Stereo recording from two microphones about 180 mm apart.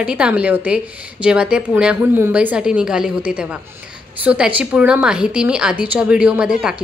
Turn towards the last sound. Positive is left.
turn(degrees=-5)  # may be behind; listen again after turning